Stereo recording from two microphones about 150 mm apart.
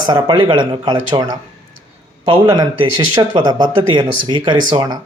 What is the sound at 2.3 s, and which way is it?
A man's voice, 30° right (ahead or behind).